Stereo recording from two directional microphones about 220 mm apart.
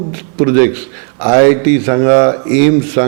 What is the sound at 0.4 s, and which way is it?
A man's voice, 15° right (ahead or behind).